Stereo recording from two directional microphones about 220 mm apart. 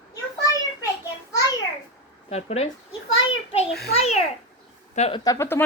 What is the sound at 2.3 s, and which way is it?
Speech, 30° left (ahead or behind).